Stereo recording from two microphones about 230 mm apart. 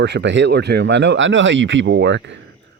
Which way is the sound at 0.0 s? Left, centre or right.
Right.